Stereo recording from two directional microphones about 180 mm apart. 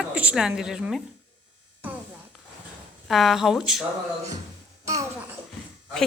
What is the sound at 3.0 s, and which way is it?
Speech, centre (ahead or behind).